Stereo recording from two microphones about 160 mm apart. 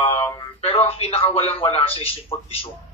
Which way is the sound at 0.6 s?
40° left (ahead or behind).